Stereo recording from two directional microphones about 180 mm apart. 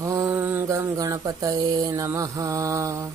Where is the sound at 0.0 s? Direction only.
15° right (ahead or behind).